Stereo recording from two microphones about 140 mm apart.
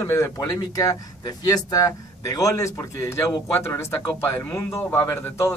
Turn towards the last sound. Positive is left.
turn(degrees=20)  # may be behind; listen again after turning